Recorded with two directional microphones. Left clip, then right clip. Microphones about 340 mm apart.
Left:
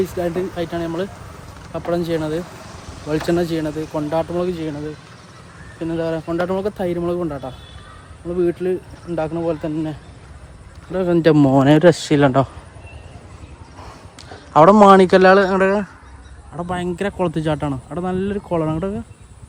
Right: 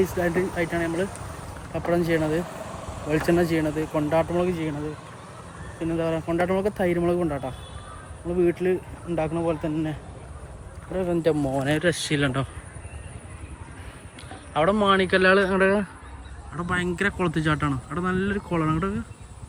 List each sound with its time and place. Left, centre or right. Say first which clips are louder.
0.2 s speech: left 2 dB; centre
2.6 s a sound: right 1 dB; centre
3.1 s speech: left 3 dB; centre
5.8 s speech: left 4 dB; centre
10.9 s speech: left 8 dB; left
11.3 s speech: left 12 dB; left
11.6 s speech: left 11 dB; centre
15.0 s speech: left 8 dB; centre